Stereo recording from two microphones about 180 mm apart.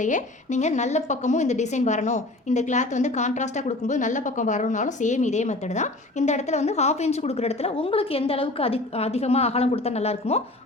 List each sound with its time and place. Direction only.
0.0 s a woman's voice: 40° left (ahead or behind)